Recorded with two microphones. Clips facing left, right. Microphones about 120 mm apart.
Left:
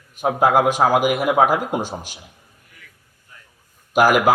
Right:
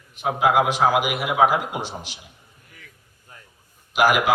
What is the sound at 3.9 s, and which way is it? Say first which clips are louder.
Speech: left 4 dB; 45° left (ahead or behind).